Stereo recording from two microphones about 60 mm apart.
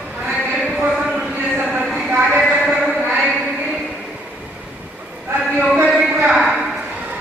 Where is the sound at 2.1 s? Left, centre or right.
Right.